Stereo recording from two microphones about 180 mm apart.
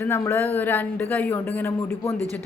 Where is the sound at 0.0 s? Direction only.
10° left (ahead or behind).